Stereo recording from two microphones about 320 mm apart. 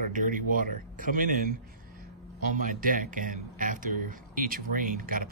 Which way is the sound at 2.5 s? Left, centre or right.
Right.